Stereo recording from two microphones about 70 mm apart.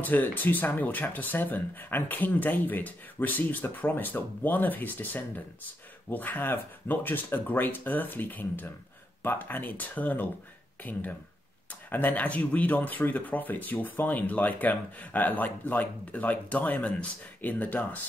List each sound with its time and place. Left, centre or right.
0.0 s speech: left